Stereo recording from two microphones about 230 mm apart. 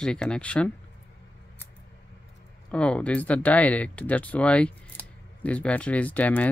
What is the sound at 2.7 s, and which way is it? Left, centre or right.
Speech, centre.